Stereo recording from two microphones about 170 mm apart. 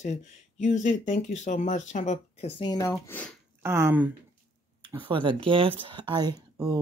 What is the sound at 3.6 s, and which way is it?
Speech, 15° right (ahead or behind).